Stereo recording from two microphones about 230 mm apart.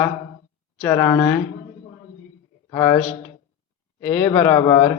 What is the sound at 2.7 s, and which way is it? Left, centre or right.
Speech, centre.